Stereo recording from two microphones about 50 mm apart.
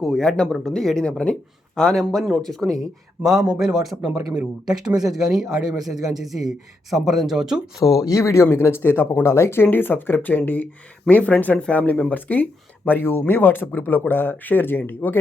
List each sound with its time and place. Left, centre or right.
0.0 s a man's voice: centre
3.4 s a man's voice: centre
7.9 s speech: left
8.4 s speech: left
9.2 s speech: left
9.6 s speech: left